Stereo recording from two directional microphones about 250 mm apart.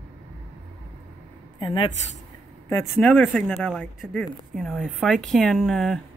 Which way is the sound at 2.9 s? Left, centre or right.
Centre.